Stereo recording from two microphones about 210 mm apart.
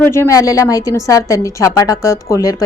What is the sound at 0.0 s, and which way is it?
A woman's voice, 10° left (ahead or behind).